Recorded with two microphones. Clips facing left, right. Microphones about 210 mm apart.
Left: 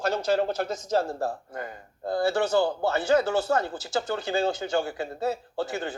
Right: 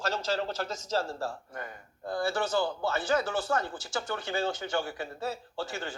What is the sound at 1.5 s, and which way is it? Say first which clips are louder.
Speech: left 5 dB; 30° left (ahead or behind).